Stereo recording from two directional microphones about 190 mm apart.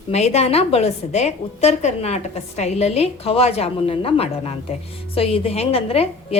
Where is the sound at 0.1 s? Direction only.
35° left (ahead or behind).